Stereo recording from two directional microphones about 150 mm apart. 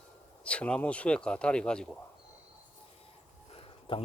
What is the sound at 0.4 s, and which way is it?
Speech, 10° left (ahead or behind).